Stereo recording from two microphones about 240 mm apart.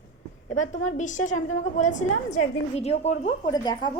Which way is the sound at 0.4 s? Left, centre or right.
Left.